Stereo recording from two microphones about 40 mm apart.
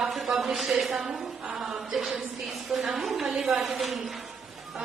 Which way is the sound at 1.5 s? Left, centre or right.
Centre.